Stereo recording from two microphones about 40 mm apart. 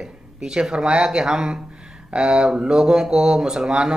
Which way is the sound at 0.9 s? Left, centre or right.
Centre.